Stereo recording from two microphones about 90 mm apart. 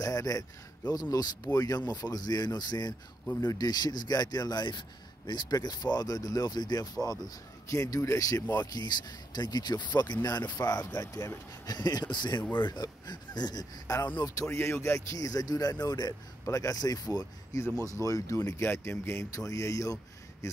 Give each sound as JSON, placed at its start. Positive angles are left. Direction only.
{"t": 0.0, "sound": "a man's voice", "side_deg": 40}
{"t": 8.5, "sound": "a man's voice", "side_deg": 50}
{"t": 14.2, "sound": "speech", "side_deg": 40}
{"t": 15.7, "sound": "speech", "side_deg": 30}